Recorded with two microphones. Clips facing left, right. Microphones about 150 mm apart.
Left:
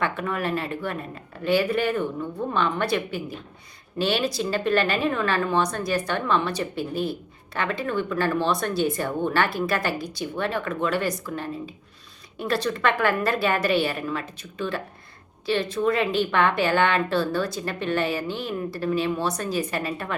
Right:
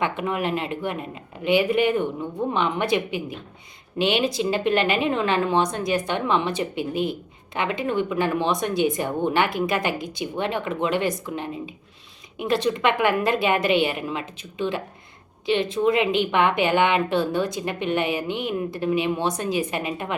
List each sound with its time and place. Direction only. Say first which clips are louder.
0.0 s speech: right 2 dB; 15° right (ahead or behind)